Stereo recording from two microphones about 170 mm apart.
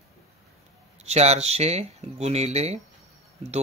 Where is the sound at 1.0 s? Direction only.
40° right (ahead or behind).